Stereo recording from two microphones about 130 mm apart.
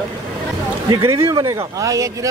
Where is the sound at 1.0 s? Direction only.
20° right (ahead or behind).